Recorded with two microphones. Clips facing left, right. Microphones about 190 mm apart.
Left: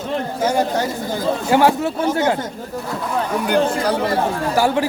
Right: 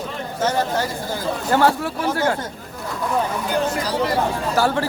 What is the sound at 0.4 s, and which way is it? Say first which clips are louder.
Speech: left 2 dB; 10° left (ahead or behind).